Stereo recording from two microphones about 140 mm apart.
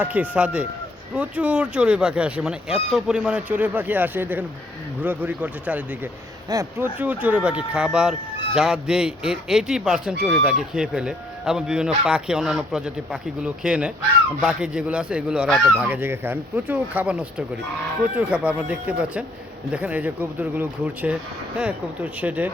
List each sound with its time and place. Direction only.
0.0 s speech: 10° right (ahead or behind)
6.5 s speech: 25° right (ahead or behind)
6.8 s speech: 10° right (ahead or behind)